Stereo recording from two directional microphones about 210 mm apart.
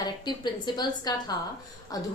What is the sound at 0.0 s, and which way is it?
A woman's voice, 20° left (ahead or behind).